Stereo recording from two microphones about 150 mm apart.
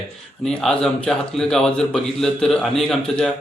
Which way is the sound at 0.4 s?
5° left (ahead or behind).